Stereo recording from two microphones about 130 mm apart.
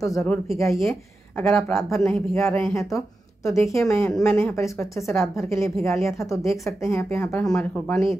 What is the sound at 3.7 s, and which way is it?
A woman's voice, 20° left (ahead or behind).